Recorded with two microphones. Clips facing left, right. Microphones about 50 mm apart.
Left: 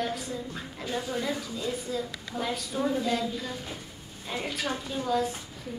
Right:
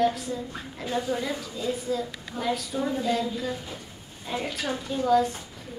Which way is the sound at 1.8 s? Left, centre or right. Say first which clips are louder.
Right 3 dB; centre.